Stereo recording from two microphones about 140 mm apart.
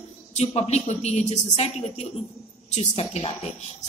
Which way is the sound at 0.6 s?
50° left (ahead or behind).